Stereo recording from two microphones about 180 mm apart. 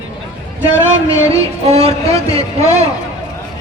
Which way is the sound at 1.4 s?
35° right (ahead or behind).